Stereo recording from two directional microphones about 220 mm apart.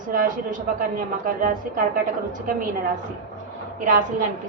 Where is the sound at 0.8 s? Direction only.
40° right (ahead or behind).